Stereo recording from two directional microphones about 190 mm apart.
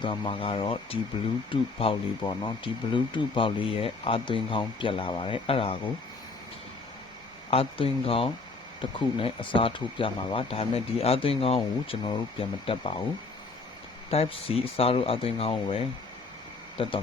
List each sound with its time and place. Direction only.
0.0 s speech: 25° left (ahead or behind)
7.5 s speech: 30° left (ahead or behind)
14.1 s speech: 30° left (ahead or behind)